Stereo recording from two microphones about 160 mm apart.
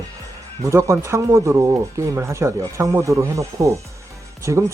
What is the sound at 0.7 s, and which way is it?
Speech, 20° right (ahead or behind).